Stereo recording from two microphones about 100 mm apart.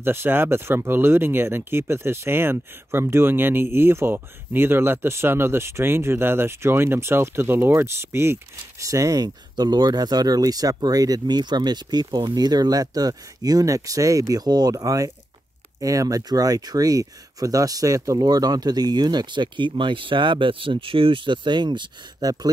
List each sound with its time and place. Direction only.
0.0 s speech: 25° right (ahead or behind); by 22.5 s 40° right (ahead or behind)